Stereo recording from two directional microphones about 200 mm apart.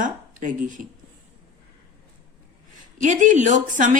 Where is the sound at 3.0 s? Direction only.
40° right (ahead or behind).